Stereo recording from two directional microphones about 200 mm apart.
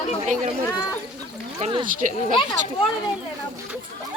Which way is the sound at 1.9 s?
45° right (ahead or behind).